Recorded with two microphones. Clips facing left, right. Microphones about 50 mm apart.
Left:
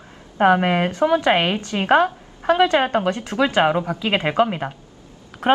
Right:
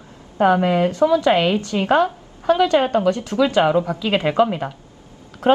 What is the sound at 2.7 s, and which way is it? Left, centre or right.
A woman's voice, left.